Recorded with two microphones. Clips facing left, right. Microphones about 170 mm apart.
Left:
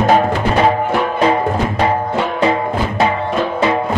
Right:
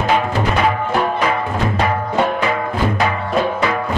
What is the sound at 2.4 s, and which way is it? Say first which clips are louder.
Music: left 3 dB; 25° left (ahead or behind).